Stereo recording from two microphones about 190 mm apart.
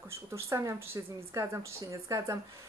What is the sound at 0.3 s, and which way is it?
Speech, 15° right (ahead or behind).